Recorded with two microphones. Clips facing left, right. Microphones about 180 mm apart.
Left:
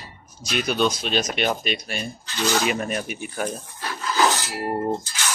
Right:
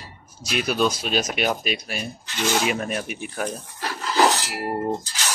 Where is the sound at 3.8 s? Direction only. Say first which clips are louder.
Right 2 dB; 35° right (ahead or behind).